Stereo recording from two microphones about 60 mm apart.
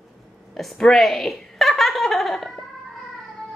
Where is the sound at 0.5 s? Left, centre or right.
Centre.